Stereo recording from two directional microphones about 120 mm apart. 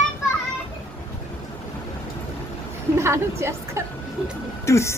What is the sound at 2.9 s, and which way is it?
Speech, 20° right (ahead or behind).